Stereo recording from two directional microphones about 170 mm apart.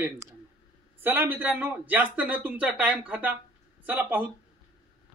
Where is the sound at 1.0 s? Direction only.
10° right (ahead or behind).